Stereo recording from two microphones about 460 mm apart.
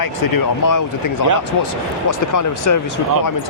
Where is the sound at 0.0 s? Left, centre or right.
Left.